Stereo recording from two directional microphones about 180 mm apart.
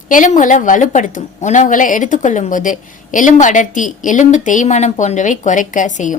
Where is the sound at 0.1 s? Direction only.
45° left (ahead or behind).